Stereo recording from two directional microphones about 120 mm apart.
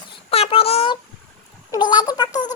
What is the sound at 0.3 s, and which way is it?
Child singing, 55° left (ahead or behind).